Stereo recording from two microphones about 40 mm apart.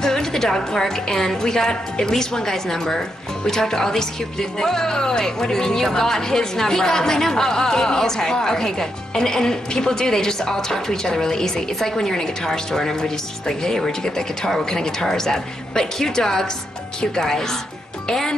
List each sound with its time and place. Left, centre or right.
0.0 s a woman's voice: centre